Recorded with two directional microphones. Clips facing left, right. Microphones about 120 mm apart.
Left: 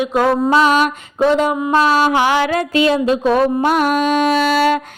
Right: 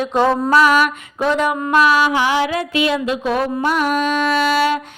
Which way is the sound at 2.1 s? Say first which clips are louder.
Left 3 dB; 70° left (ahead or behind).